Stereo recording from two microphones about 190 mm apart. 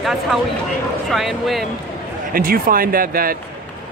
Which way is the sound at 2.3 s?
50° right (ahead or behind).